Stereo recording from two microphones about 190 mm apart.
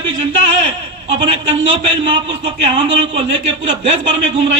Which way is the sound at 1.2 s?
25° right (ahead or behind).